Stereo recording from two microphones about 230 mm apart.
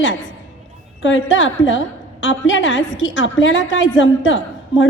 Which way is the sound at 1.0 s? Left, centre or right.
Left.